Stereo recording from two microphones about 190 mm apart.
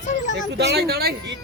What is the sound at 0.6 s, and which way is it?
Speech, 60° right (ahead or behind).